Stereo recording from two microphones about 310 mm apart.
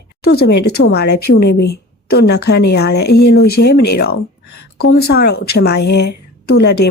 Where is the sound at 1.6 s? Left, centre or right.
Left.